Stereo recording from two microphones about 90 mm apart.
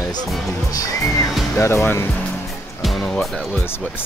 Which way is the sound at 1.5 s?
30° left (ahead or behind).